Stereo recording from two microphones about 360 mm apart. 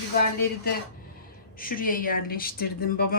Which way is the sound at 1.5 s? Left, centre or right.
Left.